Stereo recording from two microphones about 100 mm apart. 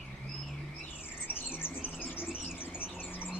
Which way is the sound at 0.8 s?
20° left (ahead or behind).